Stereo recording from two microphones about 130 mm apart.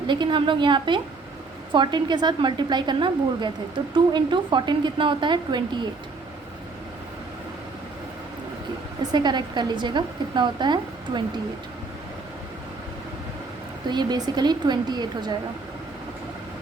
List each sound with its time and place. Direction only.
0.1 s a woman's voice: 40° right (ahead or behind)
9.1 s a woman's voice: 35° right (ahead or behind)
13.9 s a woman's voice: 35° right (ahead or behind)